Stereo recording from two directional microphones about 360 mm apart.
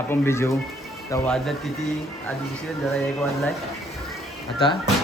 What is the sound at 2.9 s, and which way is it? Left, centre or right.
Speech, centre.